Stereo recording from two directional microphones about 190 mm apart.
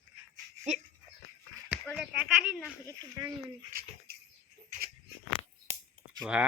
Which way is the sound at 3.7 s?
50° right (ahead or behind).